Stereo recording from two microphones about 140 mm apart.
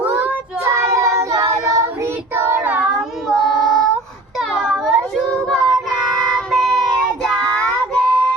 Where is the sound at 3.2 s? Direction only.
Centre (ahead or behind).